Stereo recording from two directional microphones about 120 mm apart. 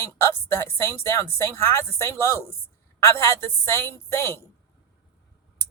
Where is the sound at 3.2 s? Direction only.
20° left (ahead or behind).